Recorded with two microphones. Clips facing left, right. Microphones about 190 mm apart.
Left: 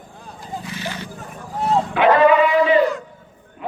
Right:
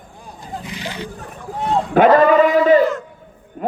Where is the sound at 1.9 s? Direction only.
45° right (ahead or behind).